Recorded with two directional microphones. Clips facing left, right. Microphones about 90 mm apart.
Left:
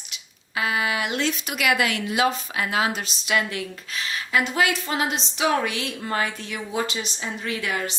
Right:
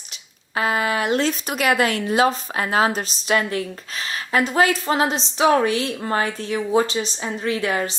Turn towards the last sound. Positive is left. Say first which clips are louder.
# right 5 dB
turn(degrees=-35)  # may be behind; listen again after turning